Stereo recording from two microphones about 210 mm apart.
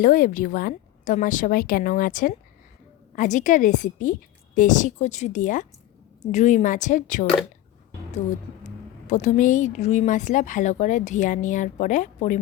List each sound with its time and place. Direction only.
0.0 s speech: 40° left (ahead or behind)
8.6 s speech: 35° left (ahead or behind)